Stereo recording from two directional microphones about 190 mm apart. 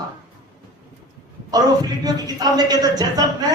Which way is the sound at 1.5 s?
20° right (ahead or behind).